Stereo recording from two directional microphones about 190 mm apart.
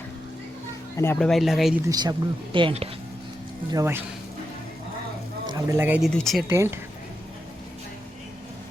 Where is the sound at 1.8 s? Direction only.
20° right (ahead or behind).